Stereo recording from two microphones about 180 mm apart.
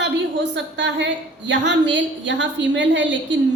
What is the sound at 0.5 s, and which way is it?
A woman's voice, 80° right.